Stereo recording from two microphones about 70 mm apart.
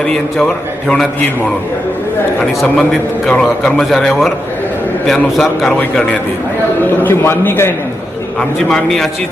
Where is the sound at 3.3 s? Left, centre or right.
Centre.